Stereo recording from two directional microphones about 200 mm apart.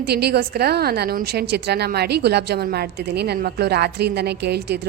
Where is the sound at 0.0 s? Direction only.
55° right (ahead or behind).